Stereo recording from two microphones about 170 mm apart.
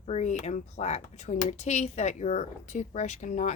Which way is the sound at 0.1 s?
40° left (ahead or behind).